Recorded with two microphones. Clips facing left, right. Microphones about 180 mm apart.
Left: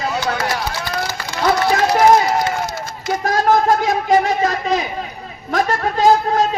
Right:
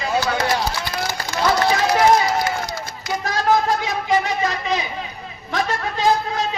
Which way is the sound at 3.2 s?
45° left (ahead or behind).